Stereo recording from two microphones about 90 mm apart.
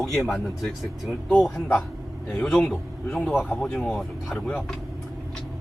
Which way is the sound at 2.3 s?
10° left (ahead or behind).